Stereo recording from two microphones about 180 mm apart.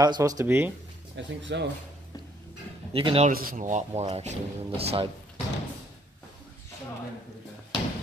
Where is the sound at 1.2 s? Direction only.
85° right.